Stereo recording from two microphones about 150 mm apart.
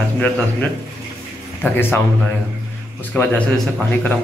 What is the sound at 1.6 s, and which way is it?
Speech, 15° left (ahead or behind).